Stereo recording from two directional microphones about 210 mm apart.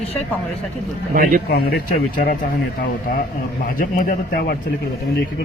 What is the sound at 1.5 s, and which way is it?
Speech, 50° left (ahead or behind).